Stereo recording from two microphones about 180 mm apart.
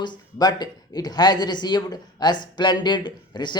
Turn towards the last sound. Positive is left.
turn(degrees=25)  # may be behind; listen again after turning